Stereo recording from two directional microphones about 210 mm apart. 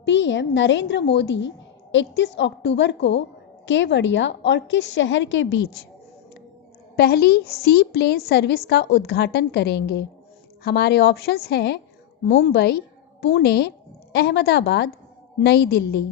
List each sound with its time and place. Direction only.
0.0 s a woman's voice: 60° left (ahead or behind)
6.9 s a woman's voice: 50° left (ahead or behind)